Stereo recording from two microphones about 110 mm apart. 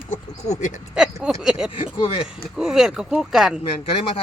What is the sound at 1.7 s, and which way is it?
Speech, 50° left (ahead or behind).